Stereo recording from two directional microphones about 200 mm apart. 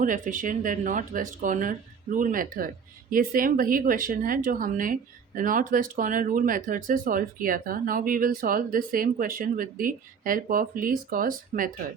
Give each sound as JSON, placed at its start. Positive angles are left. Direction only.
{"t": 0.0, "sound": "a woman's voice", "side_deg": -40}